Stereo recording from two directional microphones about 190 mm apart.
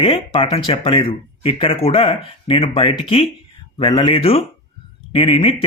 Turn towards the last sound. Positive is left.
turn(degrees=30)  # may be behind; listen again after turning